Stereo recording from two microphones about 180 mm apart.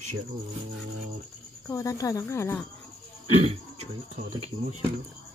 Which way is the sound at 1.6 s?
15° left (ahead or behind).